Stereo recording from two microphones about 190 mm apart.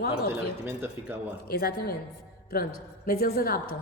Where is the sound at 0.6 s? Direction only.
10° right (ahead or behind).